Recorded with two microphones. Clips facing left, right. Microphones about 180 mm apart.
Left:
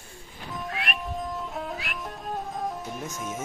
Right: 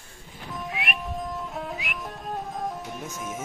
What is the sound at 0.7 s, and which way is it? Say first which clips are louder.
Music: even; 20° right (ahead or behind).